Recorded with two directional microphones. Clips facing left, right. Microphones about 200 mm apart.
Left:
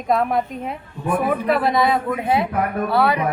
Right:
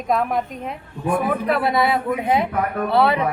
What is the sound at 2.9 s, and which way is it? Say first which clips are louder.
Speech: right 2 dB; 25° right (ahead or behind).